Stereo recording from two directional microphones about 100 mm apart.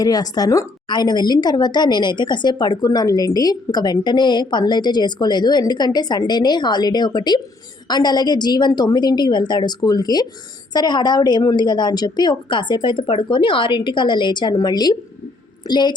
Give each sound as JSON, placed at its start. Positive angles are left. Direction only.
{"t": 0.0, "sound": "a woman's voice", "side_deg": 40}